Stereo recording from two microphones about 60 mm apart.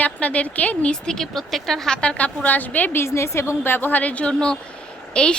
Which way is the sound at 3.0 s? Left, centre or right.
Left.